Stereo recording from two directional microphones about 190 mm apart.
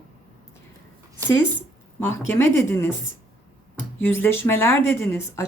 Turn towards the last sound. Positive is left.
turn(degrees=15)  # may be behind; listen again after turning